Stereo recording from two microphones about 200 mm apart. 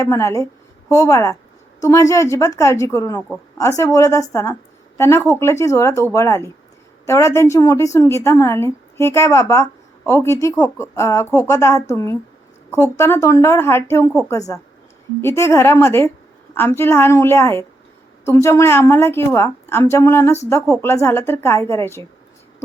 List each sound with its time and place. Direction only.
0.0 s speech: 15° left (ahead or behind)